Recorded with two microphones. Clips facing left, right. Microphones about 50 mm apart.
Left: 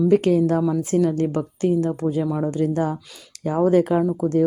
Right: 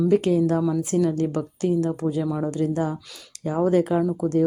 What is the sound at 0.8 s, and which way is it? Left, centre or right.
Speech, left.